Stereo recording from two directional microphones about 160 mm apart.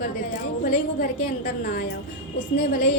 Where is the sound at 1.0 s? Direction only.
60° left (ahead or behind).